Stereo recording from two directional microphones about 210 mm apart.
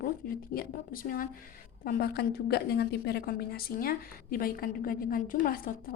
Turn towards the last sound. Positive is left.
turn(degrees=40)  # may be behind; listen again after turning